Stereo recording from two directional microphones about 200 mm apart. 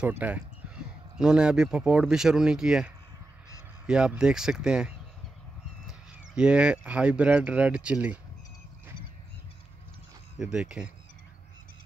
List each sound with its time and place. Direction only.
0.0 s speech: 5° right (ahead or behind)
10.4 s speech: 5° right (ahead or behind)